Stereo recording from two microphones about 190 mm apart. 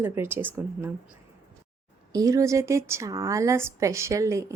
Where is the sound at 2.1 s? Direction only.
15° right (ahead or behind).